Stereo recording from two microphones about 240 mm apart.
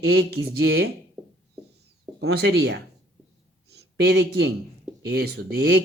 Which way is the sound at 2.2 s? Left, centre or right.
Right.